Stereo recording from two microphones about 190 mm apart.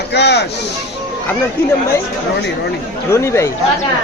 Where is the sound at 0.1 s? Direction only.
60° left (ahead or behind).